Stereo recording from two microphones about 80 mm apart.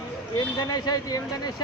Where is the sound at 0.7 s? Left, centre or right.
Left.